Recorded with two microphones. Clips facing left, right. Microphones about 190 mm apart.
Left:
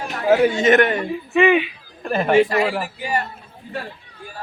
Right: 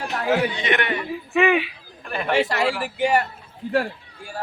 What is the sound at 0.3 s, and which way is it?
Speech, 45° left (ahead or behind).